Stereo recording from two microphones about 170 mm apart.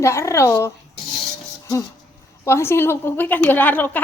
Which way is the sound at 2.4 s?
15° left (ahead or behind).